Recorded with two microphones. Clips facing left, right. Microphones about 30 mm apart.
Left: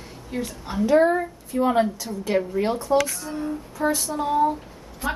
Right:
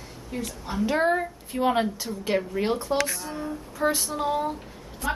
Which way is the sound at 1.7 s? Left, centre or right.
Centre.